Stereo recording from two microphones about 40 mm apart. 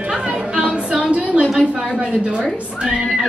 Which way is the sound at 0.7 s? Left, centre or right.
Right.